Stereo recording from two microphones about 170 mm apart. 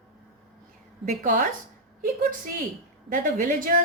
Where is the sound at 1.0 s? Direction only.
55° right (ahead or behind).